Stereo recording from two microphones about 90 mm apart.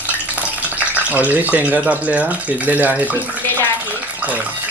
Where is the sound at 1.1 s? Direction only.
20° right (ahead or behind).